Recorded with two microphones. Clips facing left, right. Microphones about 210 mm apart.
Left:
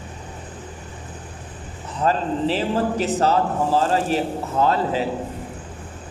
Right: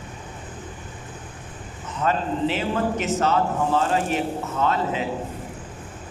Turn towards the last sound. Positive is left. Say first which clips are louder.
# left 3 dB
turn(degrees=35)  # may be behind; listen again after turning